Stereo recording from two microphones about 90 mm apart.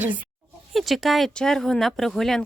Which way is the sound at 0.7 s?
Centre (ahead or behind).